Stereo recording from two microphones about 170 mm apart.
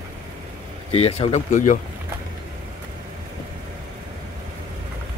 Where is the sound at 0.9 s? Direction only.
35° left (ahead or behind).